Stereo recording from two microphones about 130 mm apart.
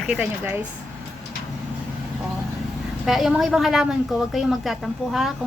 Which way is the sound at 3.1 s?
Centre (ahead or behind).